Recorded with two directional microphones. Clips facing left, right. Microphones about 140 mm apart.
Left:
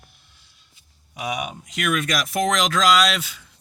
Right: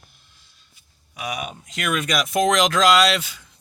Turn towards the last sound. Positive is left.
turn(degrees=0)  # may be behind; listen again after turning